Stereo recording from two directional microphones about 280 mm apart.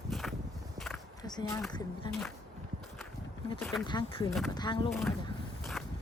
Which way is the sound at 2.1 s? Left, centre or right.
Centre.